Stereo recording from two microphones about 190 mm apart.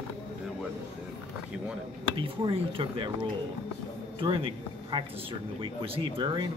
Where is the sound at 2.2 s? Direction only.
25° right (ahead or behind).